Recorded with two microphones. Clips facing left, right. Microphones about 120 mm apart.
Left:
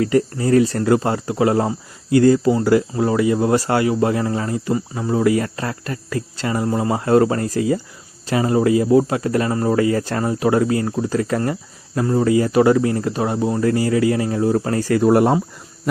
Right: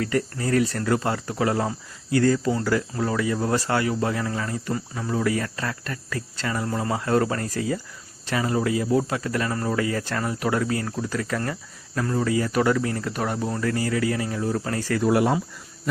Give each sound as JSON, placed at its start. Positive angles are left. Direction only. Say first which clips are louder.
{"t": 0.0, "sound": "speech", "louder": "left 7 dB", "side_deg": 25}